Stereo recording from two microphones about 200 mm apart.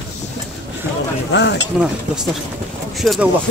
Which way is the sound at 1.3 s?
60° left (ahead or behind).